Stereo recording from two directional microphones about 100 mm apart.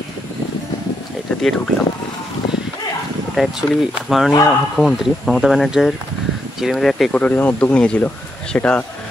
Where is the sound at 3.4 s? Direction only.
Centre (ahead or behind).